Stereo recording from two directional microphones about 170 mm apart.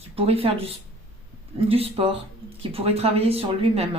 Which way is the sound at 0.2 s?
35° right (ahead or behind).